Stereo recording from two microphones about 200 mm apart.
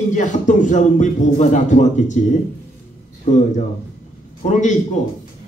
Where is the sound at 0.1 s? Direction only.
40° left (ahead or behind).